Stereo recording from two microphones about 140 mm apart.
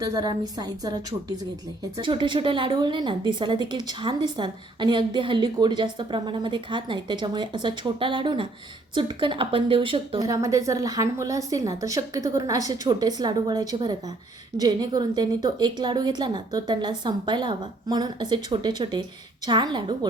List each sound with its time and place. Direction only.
0.0 s a woman's voice: 25° right (ahead or behind)
2.0 s a woman's voice: 35° right (ahead or behind)
10.2 s a woman's voice: 25° right (ahead or behind)